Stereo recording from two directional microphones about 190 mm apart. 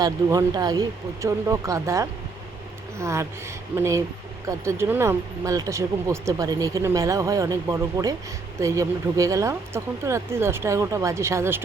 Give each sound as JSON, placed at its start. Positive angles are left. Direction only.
{"t": 0.0, "sound": "speech", "side_deg": -20}